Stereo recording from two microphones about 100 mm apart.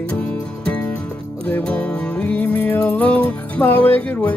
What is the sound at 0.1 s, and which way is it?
Music, 15° left (ahead or behind).